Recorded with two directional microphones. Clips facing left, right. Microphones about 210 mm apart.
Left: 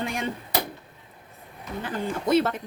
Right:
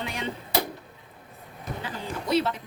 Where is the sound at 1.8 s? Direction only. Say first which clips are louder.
Left 6 dB; 50° left (ahead or behind).